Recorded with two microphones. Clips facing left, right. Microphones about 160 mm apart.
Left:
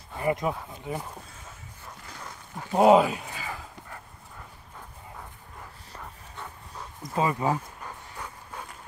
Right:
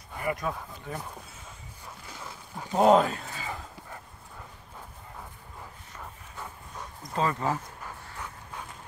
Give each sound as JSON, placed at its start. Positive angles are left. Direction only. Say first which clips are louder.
{"t": 0.2, "sound": "speech", "louder": "left 4 dB", "side_deg": 25}
{"t": 2.0, "sound": "a sound", "louder": "even", "side_deg": -5}
{"t": 2.7, "sound": "speech", "louder": "left 2 dB", "side_deg": 5}
{"t": 7.2, "sound": "dog", "louder": "left 2 dB", "side_deg": 15}